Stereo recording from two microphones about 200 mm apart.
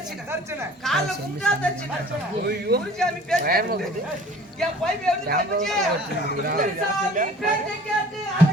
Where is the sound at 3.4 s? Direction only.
45° right (ahead or behind).